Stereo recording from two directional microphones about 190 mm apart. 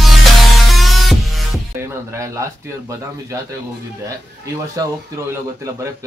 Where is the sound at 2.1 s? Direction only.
15° right (ahead or behind).